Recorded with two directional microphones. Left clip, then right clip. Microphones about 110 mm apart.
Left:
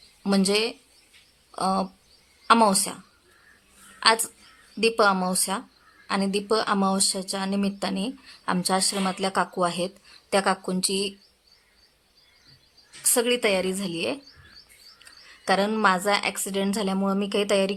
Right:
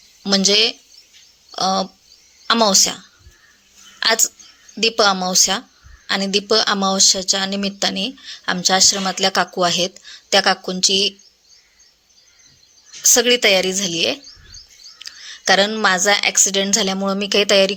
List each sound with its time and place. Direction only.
0.3 s a woman's voice: 15° right (ahead or behind)
4.0 s a woman's voice: 15° right (ahead or behind)
13.0 s a woman's voice: 15° right (ahead or behind)
14.9 s a sound: 20° right (ahead or behind)
15.8 s a woman's voice: 20° right (ahead or behind)